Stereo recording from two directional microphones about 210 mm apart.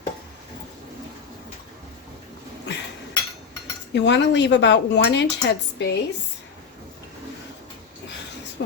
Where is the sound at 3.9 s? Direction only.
55° left (ahead or behind).